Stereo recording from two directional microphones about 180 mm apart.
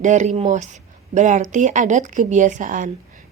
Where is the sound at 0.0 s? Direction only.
40° right (ahead or behind).